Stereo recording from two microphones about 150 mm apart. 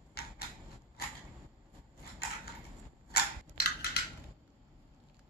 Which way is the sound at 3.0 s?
90° left.